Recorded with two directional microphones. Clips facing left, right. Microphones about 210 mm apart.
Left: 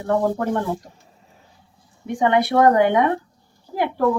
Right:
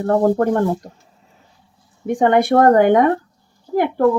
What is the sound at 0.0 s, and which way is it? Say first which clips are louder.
Speech: right 5 dB; 50° right (ahead or behind).